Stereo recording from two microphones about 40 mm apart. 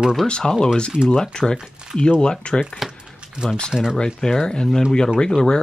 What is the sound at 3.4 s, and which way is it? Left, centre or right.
Speech, right.